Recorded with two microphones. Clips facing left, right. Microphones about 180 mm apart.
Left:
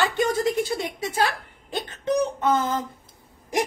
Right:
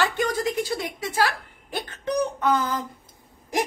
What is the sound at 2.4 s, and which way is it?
Speech, 25° left (ahead or behind).